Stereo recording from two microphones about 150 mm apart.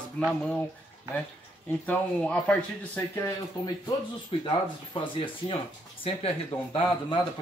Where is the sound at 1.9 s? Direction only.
10° left (ahead or behind).